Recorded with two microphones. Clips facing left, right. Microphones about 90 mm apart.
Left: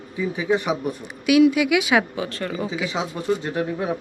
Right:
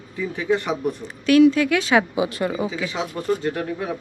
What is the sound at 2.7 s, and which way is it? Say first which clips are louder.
Speech: left 1 dB; 5° left (ahead or behind).